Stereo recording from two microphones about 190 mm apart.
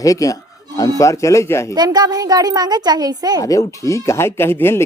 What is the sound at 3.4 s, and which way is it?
Speech, 15° left (ahead or behind).